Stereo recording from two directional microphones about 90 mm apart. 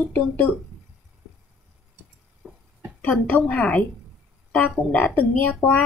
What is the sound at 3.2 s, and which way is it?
A woman's voice, 15° left (ahead or behind).